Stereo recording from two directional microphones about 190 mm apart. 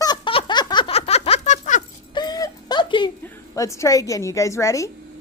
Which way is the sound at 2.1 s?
20° left (ahead or behind).